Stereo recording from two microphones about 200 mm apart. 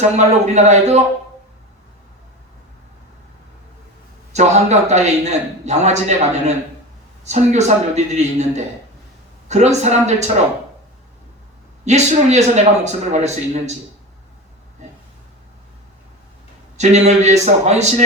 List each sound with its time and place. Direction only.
0.2 s a man's voice: 35° right (ahead or behind)
4.4 s a man's voice: 35° right (ahead or behind)
11.9 s a man's voice: 35° right (ahead or behind)
16.7 s a man's voice: 35° right (ahead or behind)